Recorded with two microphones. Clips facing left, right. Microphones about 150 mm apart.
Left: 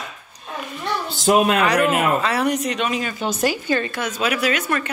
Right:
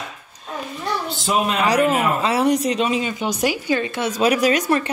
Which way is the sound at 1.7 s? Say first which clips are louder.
Even; 30° right (ahead or behind).